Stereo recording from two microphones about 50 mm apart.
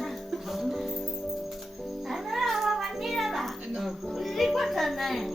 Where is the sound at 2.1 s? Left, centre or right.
Centre.